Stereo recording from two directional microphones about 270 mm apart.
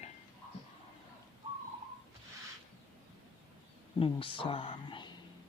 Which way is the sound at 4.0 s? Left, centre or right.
Centre.